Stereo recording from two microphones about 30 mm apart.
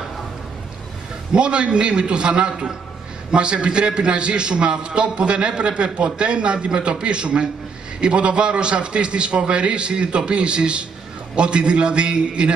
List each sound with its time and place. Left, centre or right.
1.3 s a man's voice: right